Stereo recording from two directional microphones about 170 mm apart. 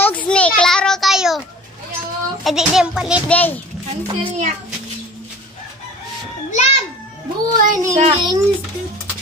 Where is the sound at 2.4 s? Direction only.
Centre (ahead or behind).